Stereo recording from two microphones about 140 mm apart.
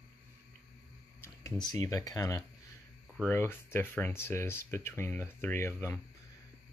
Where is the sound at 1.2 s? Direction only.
25° left (ahead or behind).